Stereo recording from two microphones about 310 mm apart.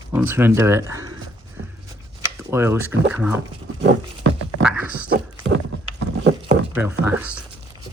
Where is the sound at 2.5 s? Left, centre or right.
Centre.